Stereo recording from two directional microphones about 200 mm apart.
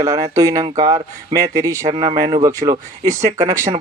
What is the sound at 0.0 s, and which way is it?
Speech, 15° right (ahead or behind).